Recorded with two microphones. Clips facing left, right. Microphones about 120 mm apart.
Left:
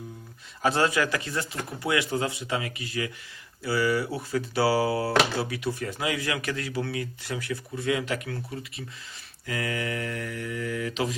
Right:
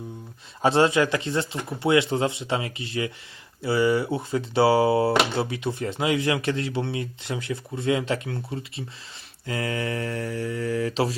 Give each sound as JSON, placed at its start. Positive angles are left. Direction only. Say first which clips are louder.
{"t": 0.6, "sound": "speech", "louder": "right 5 dB", "side_deg": -25}